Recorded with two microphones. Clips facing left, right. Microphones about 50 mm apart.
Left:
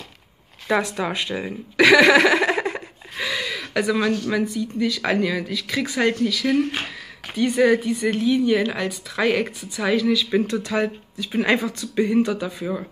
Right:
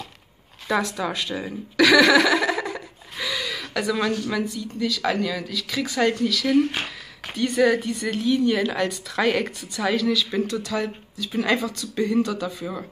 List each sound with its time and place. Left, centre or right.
0.7 s a sound: left
4.3 s a woman's voice: left
10.4 s speech: left